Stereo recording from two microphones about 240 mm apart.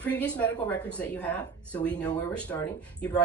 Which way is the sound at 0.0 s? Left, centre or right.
Centre.